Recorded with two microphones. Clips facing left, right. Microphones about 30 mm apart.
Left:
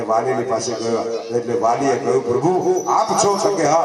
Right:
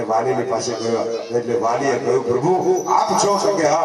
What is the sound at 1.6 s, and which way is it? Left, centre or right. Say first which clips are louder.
A man's voice: left 1 dB; centre.